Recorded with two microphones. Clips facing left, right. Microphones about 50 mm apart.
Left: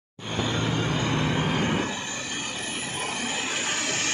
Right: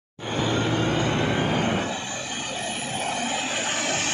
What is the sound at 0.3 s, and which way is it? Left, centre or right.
Vehicle, centre.